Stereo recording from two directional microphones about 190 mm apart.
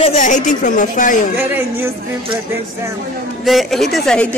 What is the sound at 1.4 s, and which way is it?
Speech, 10° right (ahead or behind).